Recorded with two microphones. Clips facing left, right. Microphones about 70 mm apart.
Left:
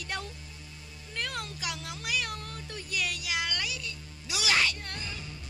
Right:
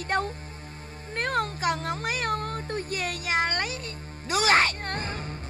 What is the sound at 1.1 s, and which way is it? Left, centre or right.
Cat, right.